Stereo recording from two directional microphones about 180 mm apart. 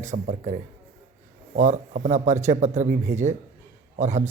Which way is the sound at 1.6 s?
40° right (ahead or behind).